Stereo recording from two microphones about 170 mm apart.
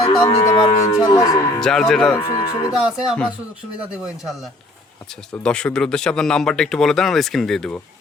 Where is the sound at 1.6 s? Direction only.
Centre (ahead or behind).